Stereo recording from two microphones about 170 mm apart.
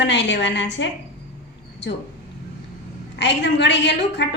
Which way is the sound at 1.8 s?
90° left.